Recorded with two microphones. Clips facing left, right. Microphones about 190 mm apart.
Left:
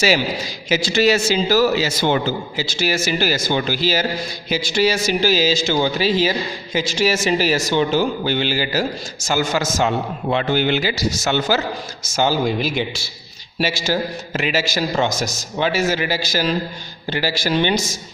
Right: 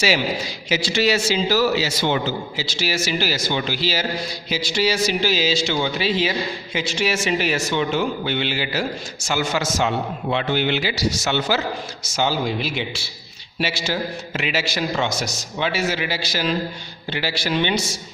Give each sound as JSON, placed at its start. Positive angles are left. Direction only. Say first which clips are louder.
{"t": 0.7, "sound": "a man's voice", "louder": "left 4 dB", "side_deg": 45}